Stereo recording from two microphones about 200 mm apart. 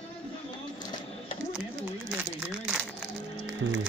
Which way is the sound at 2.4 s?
5° right (ahead or behind).